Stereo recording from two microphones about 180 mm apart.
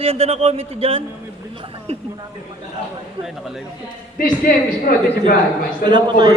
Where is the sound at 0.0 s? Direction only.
35° right (ahead or behind).